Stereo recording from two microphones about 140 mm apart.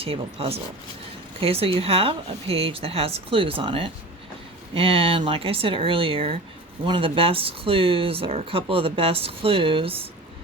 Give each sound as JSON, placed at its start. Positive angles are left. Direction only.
{"t": 0.0, "sound": "speech", "side_deg": -45}